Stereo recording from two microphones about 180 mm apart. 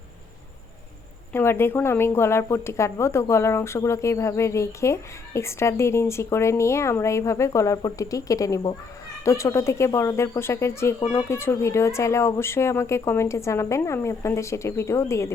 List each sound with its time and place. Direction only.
1.3 s speech: 15° left (ahead or behind)